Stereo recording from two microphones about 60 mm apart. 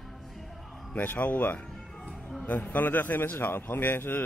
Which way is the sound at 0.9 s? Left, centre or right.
Left.